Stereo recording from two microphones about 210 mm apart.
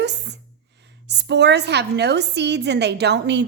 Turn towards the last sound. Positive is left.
turn(degrees=-55)  # may be behind; listen again after turning